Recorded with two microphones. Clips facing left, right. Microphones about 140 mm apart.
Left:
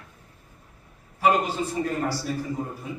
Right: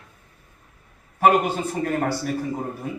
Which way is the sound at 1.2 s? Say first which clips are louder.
Right 4 dB; 55° right (ahead or behind).